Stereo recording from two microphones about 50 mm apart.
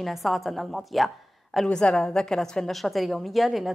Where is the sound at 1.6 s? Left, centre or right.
Centre.